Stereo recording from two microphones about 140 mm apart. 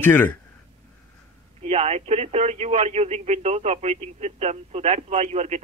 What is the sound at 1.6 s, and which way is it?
Speech, 45° right (ahead or behind).